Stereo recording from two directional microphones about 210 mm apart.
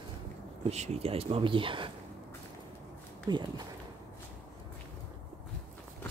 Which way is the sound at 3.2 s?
20° right (ahead or behind).